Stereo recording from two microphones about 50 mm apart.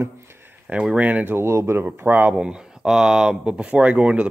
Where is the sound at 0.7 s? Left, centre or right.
Centre.